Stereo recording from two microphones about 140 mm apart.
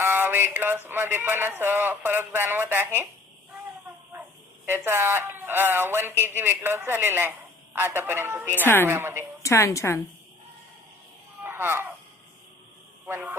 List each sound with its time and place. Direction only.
0.0 s a sound: 15° right (ahead or behind)
0.9 s speech: 15° right (ahead or behind)
4.6 s speech: 15° right (ahead or behind)
8.6 s a woman's voice: 15° left (ahead or behind)
8.9 s speech: 15° right (ahead or behind)
9.4 s a woman's voice: 20° left (ahead or behind)
11.4 s speech: 15° right (ahead or behind)
13.1 s a man's voice: 15° right (ahead or behind)